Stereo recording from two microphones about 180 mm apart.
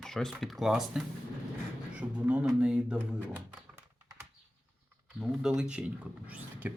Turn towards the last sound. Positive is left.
turn(degrees=-10)  # may be behind; listen again after turning